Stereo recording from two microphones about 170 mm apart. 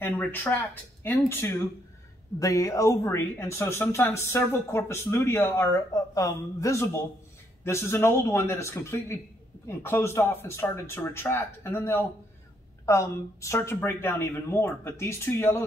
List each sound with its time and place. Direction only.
0.0 s speech: 10° left (ahead or behind)